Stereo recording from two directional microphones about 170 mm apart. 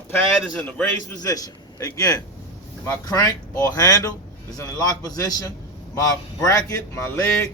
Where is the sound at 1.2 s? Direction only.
20° left (ahead or behind).